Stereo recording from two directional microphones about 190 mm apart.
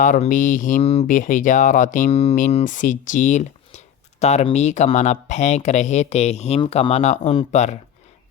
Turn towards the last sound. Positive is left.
turn(degrees=35)  # may be behind; listen again after turning